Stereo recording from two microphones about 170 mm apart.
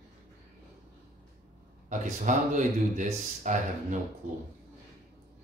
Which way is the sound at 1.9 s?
45° right (ahead or behind).